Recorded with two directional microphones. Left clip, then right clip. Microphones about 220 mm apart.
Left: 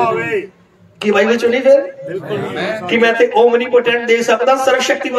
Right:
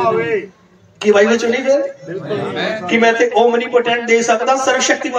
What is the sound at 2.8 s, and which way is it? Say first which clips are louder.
Speech: left 1 dB; 45° left (ahead or behind).